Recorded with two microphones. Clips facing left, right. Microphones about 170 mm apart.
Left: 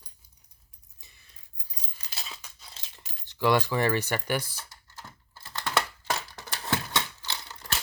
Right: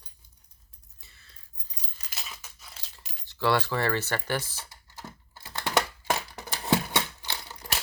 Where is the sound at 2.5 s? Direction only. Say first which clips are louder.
Right 1 dB; 30° left (ahead or behind).